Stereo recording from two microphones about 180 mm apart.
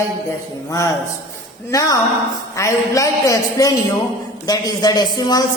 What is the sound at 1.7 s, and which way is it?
A woman's voice, 20° left (ahead or behind).